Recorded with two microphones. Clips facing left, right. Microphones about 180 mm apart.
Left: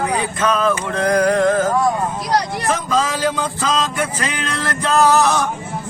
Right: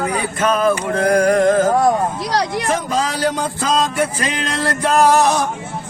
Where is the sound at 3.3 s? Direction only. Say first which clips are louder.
Right 2 dB; 50° right (ahead or behind).